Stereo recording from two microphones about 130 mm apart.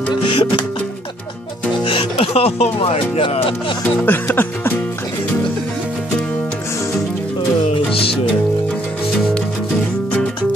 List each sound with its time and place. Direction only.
0.1 s music: 40° left (ahead or behind)
1.9 s music: 45° left (ahead or behind)
3.8 s music: 15° left (ahead or behind)
7.9 s music: 45° left (ahead or behind)